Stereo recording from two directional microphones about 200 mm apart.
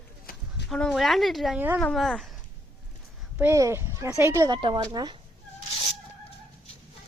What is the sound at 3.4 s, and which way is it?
Speech, 15° right (ahead or behind).